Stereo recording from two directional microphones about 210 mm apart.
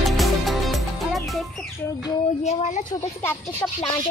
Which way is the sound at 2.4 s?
35° left (ahead or behind).